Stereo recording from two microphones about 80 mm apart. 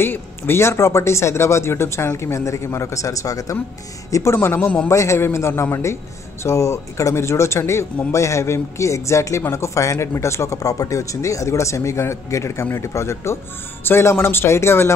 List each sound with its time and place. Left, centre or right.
0.0 s speech: left
4.8 s speech: left